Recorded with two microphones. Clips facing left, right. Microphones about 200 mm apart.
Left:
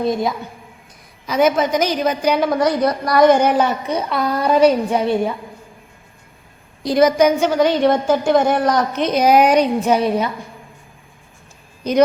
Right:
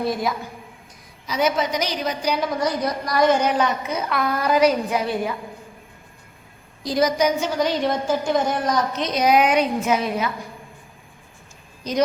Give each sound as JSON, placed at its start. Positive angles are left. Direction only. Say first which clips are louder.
{"t": 0.0, "sound": "a woman's voice", "louder": "left 4 dB", "side_deg": 25}
{"t": 1.3, "sound": "a woman's voice", "louder": "left 6 dB", "side_deg": 50}
{"t": 3.8, "sound": "a woman's voice", "louder": "left 4 dB", "side_deg": 30}
{"t": 6.8, "sound": "a woman's voice", "louder": "left 6 dB", "side_deg": 60}
{"t": 11.8, "sound": "speech", "louder": "left 7 dB", "side_deg": 60}